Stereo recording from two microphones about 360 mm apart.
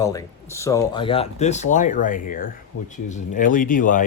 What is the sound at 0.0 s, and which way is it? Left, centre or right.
Speech, centre.